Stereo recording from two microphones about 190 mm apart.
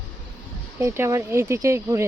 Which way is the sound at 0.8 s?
15° right (ahead or behind).